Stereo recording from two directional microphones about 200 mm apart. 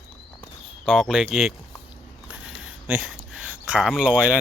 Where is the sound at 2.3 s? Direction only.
5° right (ahead or behind).